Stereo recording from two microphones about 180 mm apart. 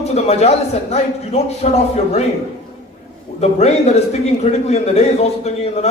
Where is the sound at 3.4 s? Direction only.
35° left (ahead or behind).